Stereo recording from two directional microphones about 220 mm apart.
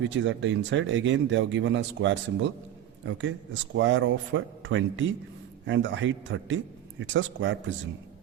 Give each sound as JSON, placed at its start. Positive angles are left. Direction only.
{"t": 0.1, "sound": "speech", "side_deg": -55}